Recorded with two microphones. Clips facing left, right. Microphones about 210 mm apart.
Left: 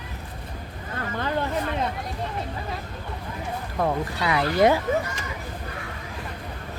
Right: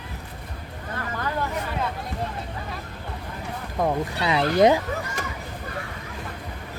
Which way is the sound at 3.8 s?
20° right (ahead or behind).